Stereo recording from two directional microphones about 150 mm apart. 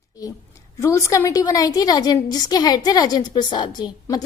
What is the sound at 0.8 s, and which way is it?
A woman's voice, 20° left (ahead or behind).